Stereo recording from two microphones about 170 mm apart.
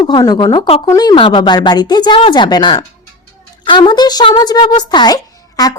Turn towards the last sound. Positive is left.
turn(degrees=20)  # may be behind; listen again after turning